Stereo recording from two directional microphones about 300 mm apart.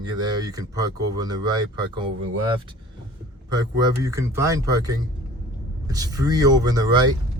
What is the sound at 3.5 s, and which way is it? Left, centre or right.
Speech, centre.